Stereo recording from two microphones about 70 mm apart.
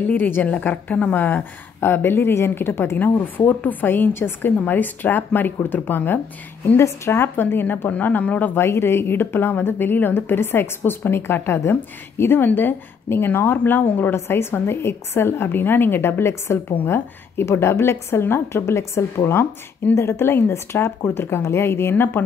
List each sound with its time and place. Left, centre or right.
0.1 s a woman's voice: left
6.8 s a woman's voice: left
8.5 s speech: left
14.1 s speech: left